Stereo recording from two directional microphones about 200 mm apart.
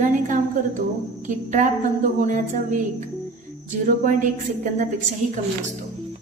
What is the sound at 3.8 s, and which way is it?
A woman's voice, 40° right (ahead or behind).